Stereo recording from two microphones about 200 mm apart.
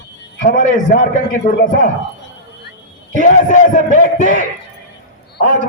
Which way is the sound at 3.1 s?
40° left (ahead or behind).